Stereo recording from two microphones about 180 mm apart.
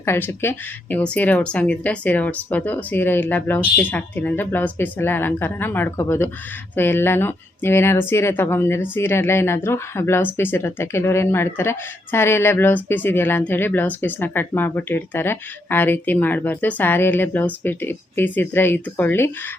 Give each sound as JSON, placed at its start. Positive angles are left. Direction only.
{"t": 0.0, "sound": "speech", "side_deg": 15}